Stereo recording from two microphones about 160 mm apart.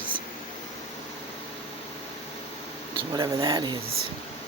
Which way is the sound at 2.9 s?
30° right (ahead or behind).